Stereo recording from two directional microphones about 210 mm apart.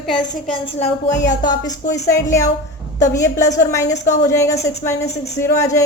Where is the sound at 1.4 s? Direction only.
15° left (ahead or behind).